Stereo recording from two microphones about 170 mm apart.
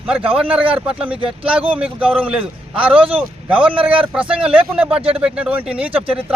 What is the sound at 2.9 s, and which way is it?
Speech, 30° right (ahead or behind).